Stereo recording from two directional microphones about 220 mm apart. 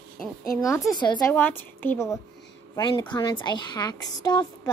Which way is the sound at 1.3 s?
10° left (ahead or behind).